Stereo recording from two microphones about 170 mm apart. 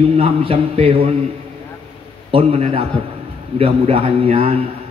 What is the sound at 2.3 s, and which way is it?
A man's voice, 35° right (ahead or behind).